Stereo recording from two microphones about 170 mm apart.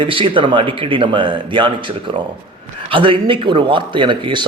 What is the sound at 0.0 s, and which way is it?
A man's voice, 30° right (ahead or behind).